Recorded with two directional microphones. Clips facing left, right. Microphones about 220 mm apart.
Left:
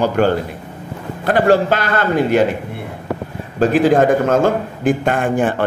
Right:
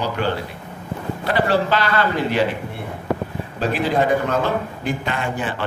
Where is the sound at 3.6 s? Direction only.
45° left (ahead or behind).